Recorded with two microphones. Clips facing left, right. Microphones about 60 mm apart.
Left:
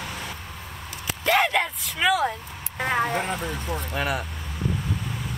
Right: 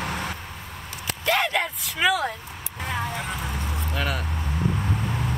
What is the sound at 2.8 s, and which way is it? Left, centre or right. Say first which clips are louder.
Vehicle: left 5 dB; left.